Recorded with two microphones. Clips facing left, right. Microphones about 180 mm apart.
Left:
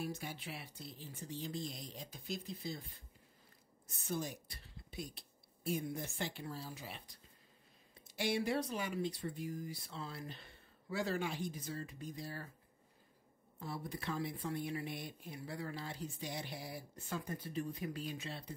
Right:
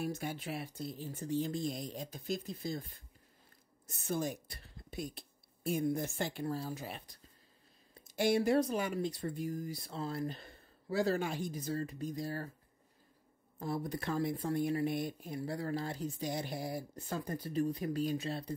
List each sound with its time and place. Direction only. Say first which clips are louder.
0.0 s speech: right 5 dB; 50° right (ahead or behind)
3.8 s speech: right 5 dB; 50° right (ahead or behind)
8.2 s speech: right 7 dB; 45° right (ahead or behind)
13.6 s speech: right 7 dB; 45° right (ahead or behind)